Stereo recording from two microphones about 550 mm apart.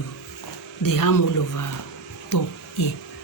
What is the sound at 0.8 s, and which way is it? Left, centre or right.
Speech, left.